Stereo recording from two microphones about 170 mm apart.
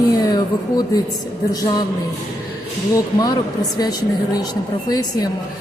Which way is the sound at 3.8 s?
20° left (ahead or behind).